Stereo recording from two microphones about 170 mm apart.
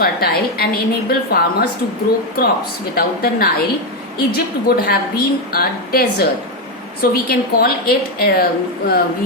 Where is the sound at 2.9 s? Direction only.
60° left (ahead or behind).